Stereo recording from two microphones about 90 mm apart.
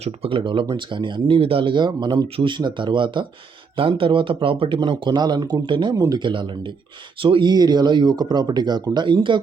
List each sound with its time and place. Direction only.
0.2 s speech: 75° right (ahead or behind); by 2.2 s 55° right (ahead or behind)
2.3 s speech: 70° right (ahead or behind)
3.8 s speech: 80° right
4.8 s speech: 55° right (ahead or behind)
5.4 s speech: 40° right (ahead or behind)
5.6 s speech: 70° right (ahead or behind)
5.9 s speech: 35° right (ahead or behind)
6.1 s speech: 65° right (ahead or behind)